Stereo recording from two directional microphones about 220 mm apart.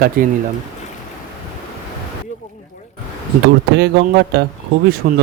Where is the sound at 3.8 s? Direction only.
45° right (ahead or behind).